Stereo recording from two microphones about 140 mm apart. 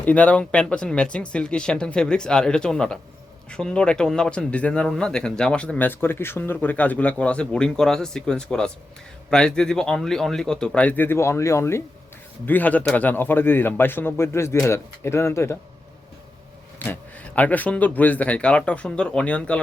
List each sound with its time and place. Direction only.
0.0 s speech: 10° left (ahead or behind)
16.8 s speech: 10° left (ahead or behind)